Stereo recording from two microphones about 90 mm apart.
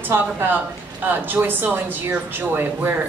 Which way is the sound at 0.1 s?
25° right (ahead or behind).